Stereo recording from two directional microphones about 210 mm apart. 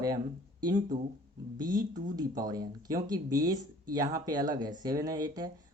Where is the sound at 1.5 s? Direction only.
20° right (ahead or behind).